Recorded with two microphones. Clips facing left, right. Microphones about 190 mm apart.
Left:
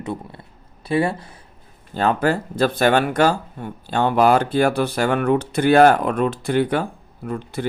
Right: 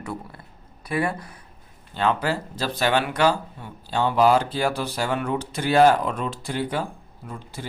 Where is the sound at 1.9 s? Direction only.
45° left (ahead or behind).